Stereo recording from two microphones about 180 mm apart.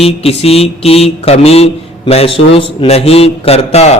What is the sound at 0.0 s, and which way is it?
Mantra, 35° left (ahead or behind).